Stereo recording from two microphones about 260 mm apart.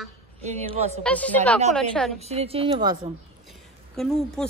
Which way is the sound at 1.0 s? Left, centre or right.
Centre.